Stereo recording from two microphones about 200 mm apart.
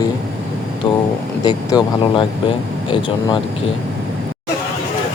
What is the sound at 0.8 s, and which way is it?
Speech, 25° left (ahead or behind).